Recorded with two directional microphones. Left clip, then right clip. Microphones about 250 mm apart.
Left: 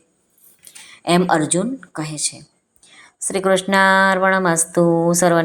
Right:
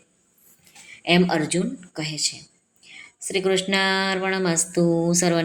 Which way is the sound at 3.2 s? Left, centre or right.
Centre.